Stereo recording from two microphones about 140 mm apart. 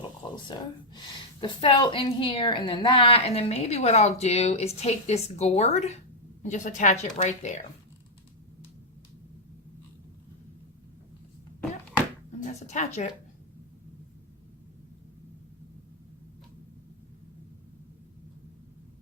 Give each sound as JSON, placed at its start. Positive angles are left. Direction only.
{"t": 0.0, "sound": "a sound", "side_deg": 30}
{"t": 1.4, "sound": "a woman's voice", "side_deg": 35}
{"t": 12.5, "sound": "a woman's voice", "side_deg": 55}